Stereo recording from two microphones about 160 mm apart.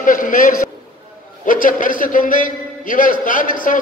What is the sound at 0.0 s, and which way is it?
A man's voice, 55° left (ahead or behind).